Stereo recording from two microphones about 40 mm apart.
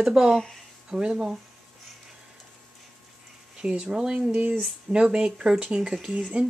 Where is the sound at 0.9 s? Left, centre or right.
Right.